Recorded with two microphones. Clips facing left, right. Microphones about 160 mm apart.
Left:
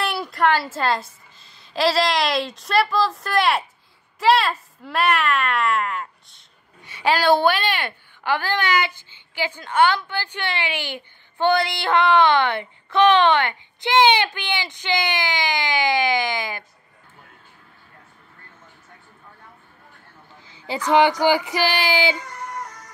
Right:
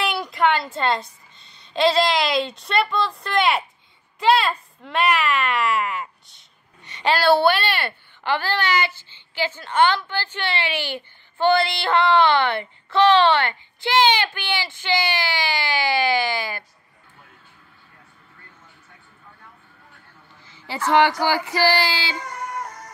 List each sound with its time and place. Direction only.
0.0 s a woman's voice: centre (ahead or behind)
6.8 s a woman's voice: 10° left (ahead or behind)
20.4 s a woman's voice: 15° left (ahead or behind)
22.1 s a sound: 55° right (ahead or behind)